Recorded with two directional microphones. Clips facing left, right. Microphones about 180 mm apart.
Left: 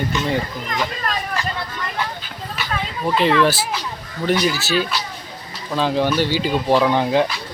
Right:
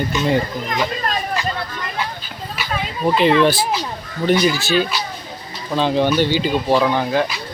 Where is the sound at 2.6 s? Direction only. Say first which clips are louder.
Right 3 dB; 15° right (ahead or behind).